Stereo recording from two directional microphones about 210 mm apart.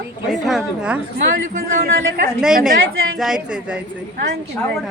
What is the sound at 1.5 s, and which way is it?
Speech, 40° right (ahead or behind).